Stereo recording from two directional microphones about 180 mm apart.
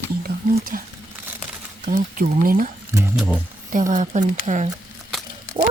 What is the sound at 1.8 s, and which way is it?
Speech, 50° right (ahead or behind).